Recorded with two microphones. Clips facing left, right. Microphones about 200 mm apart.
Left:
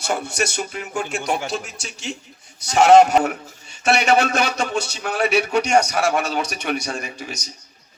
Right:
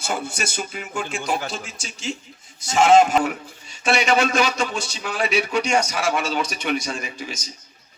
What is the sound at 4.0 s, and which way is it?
A man's voice, 55° left (ahead or behind).